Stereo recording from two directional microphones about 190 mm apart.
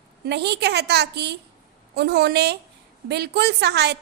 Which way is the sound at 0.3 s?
60° right (ahead or behind).